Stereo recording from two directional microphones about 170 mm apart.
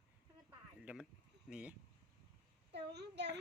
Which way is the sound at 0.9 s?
10° right (ahead or behind).